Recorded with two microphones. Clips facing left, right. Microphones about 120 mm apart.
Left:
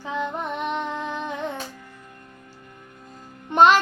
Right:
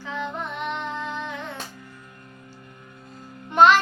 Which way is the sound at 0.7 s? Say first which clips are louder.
Left 2 dB; 15° left (ahead or behind).